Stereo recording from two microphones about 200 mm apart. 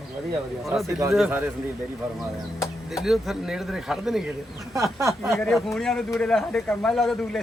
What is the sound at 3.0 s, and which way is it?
A man's voice, centre (ahead or behind).